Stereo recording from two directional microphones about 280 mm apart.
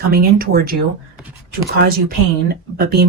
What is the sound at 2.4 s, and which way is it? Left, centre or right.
Speech, right.